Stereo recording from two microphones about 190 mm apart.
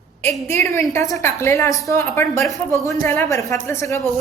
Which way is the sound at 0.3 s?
10° left (ahead or behind).